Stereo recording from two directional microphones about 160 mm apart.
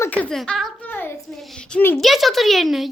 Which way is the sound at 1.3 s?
Centre (ahead or behind).